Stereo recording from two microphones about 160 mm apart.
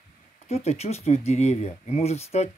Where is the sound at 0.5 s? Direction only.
40° left (ahead or behind).